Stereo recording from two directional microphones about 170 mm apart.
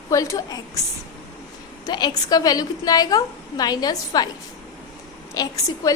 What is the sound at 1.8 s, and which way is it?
A woman's voice, 25° left (ahead or behind).